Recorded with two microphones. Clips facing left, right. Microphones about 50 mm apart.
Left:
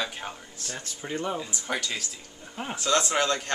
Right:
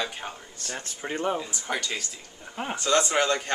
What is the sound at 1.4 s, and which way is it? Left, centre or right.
Speech, centre.